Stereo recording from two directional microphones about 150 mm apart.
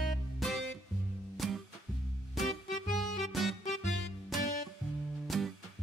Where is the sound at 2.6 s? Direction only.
60° left (ahead or behind).